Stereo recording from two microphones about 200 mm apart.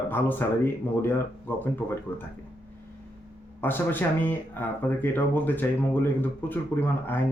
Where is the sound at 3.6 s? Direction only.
10° left (ahead or behind).